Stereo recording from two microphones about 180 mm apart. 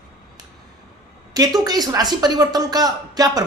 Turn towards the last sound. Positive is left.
turn(degrees=-20)  # may be behind; listen again after turning